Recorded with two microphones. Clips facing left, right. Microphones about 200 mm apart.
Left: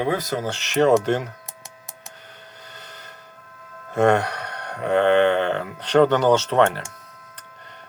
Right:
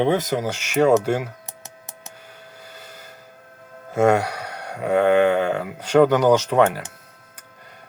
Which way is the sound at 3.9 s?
10° right (ahead or behind).